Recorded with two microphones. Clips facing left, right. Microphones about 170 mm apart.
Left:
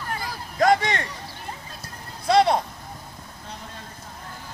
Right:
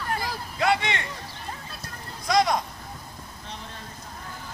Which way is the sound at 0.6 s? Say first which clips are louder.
Left 5 dB; 40° left (ahead or behind).